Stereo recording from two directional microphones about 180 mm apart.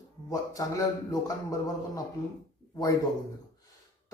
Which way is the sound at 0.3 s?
20° left (ahead or behind).